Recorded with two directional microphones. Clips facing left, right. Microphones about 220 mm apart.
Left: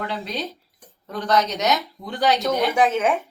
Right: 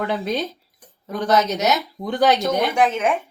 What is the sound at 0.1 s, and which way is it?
Speech, 45° right (ahead or behind).